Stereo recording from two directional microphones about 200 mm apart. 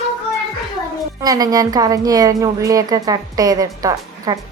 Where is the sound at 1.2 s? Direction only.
20° right (ahead or behind).